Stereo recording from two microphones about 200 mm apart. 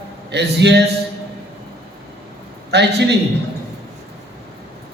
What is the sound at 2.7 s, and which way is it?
Speech, 55° right (ahead or behind).